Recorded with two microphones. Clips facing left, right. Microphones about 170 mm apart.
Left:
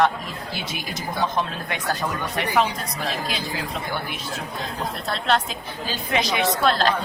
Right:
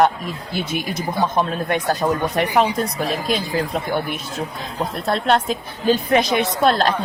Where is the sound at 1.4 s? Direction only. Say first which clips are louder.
Right 7 dB; 50° right (ahead or behind).